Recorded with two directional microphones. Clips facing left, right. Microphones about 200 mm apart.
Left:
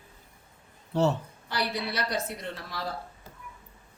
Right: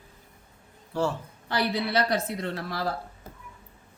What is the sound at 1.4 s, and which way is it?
A woman's voice, 60° right (ahead or behind).